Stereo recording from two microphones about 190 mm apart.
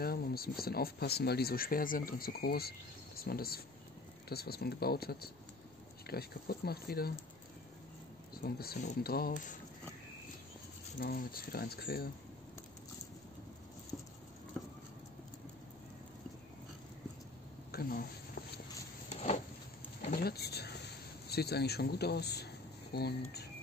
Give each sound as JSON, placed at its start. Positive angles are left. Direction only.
{"t": 0.0, "sound": "speech", "side_deg": 55}
{"t": 8.4, "sound": "speech", "side_deg": 55}
{"t": 11.0, "sound": "speech", "side_deg": 50}
{"t": 17.6, "sound": "a sound", "side_deg": 50}
{"t": 19.0, "sound": "a sound", "side_deg": 35}
{"t": 20.1, "sound": "whispering", "side_deg": 55}
{"t": 21.3, "sound": "speech", "side_deg": 55}